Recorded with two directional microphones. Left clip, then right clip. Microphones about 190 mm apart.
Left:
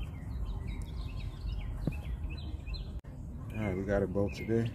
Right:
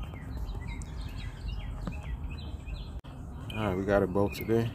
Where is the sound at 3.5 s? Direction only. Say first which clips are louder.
Right 5 dB; 10° right (ahead or behind).